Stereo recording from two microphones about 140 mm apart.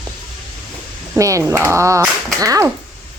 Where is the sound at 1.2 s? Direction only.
20° right (ahead or behind).